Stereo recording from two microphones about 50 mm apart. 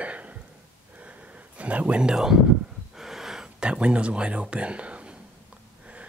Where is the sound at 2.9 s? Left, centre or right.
Centre; by 5.2 s right.